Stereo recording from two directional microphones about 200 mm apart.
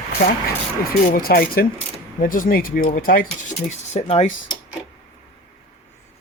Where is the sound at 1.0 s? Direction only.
45° left (ahead or behind).